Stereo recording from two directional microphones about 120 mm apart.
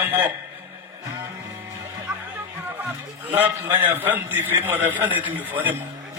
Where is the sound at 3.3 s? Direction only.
15° right (ahead or behind).